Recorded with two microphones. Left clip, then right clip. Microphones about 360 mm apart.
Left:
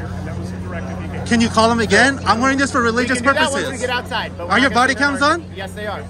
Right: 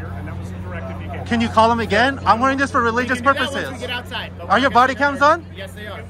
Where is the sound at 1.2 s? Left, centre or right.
Centre.